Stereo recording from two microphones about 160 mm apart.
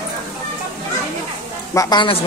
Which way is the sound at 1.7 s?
30° left (ahead or behind).